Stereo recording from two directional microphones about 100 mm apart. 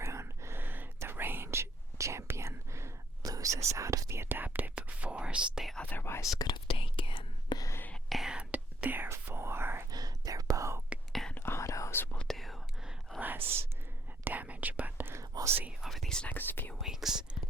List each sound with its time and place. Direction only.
0.0 s whispering: 30° right (ahead or behind); by 5.7 s 10° right (ahead or behind)
5.7 s whispering: 15° left (ahead or behind)
6.7 s whispering: 65° left (ahead or behind)
8.1 s whispering: 5° right (ahead or behind); by 9.8 s 25° right (ahead or behind)
9.9 s whispering: 40° right (ahead or behind)
11.1 s whispering: 5° left (ahead or behind)
11.3 s whispering: 25° left (ahead or behind)
12.1 s whispering: 5° left (ahead or behind)
13.1 s whispering: 15° right (ahead or behind)
15.2 s whispering: 35° right (ahead or behind)
15.8 s whispering: centre (ahead or behind)
16.3 s whispering: 20° left (ahead or behind)
16.8 s whispering: 5° right (ahead or behind)